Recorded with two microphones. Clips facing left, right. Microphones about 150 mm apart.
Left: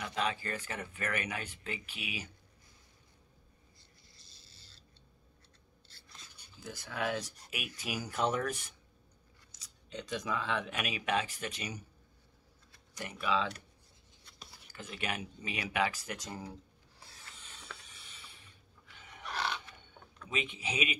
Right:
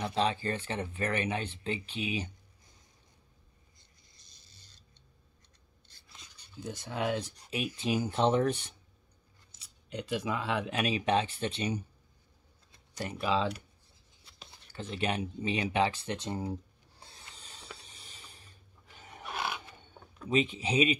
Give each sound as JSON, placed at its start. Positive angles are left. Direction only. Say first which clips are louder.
{"t": 0.0, "sound": "speech", "louder": "right 5 dB", "side_deg": -30}
{"t": 4.1, "sound": "a sound", "louder": "left 2 dB", "side_deg": -20}
{"t": 6.6, "sound": "speech", "louder": "right 3 dB", "side_deg": -20}
{"t": 9.9, "sound": "speech", "louder": "right 3 dB", "side_deg": -10}
{"t": 10.7, "sound": "speech", "louder": "right 5 dB", "side_deg": -30}
{"t": 12.9, "sound": "speech", "louder": "right 3 dB", "side_deg": -30}
{"t": 14.5, "sound": "speech", "louder": "right 7 dB", "side_deg": -30}
{"t": 17.0, "sound": "a sound", "louder": "right 2 dB", "side_deg": -30}
{"t": 20.2, "sound": "speech", "louder": "right 9 dB", "side_deg": -35}